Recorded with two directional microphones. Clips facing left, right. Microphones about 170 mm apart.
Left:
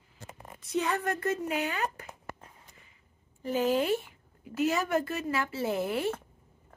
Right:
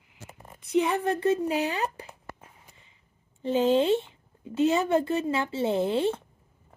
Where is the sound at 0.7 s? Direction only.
25° right (ahead or behind).